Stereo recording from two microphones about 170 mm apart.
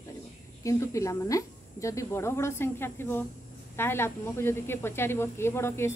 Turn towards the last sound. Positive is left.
turn(degrees=15)  # may be behind; listen again after turning